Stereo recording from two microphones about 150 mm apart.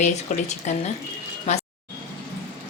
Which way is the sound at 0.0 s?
50° left (ahead or behind).